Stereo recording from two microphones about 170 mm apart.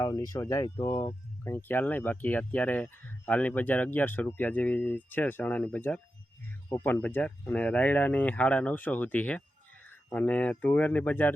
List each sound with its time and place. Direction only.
0.0 s speech: 20° left (ahead or behind)